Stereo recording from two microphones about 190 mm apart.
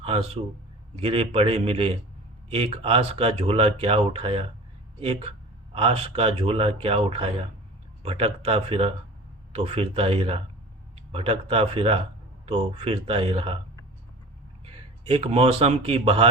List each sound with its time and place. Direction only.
0.0 s a man's voice: 30° right (ahead or behind)
14.6 s speech: 30° right (ahead or behind)